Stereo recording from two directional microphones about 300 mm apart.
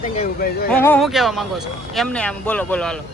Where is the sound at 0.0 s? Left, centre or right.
Left.